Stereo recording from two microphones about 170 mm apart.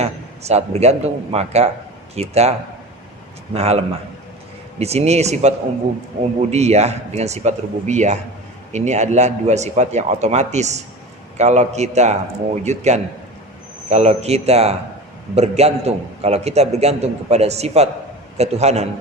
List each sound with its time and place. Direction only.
0.0 s a man's voice: 40° right (ahead or behind)